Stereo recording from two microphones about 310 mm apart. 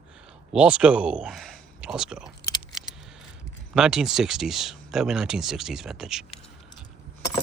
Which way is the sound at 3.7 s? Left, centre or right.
Centre.